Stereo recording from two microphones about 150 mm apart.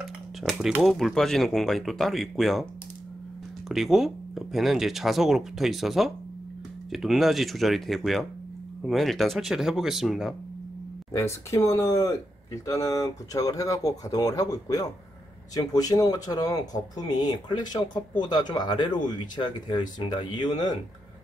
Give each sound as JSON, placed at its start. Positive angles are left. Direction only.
{"t": 0.4, "sound": "speech", "side_deg": 0}
{"t": 11.1, "sound": "speech", "side_deg": 20}